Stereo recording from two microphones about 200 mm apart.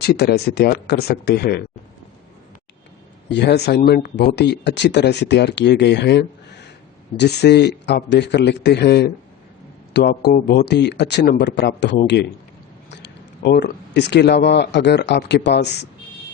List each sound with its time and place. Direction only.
0.0 s speech: 55° left (ahead or behind)
3.2 s speech: 55° left (ahead or behind)